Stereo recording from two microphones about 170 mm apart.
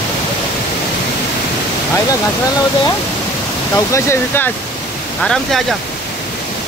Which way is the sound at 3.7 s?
15° left (ahead or behind).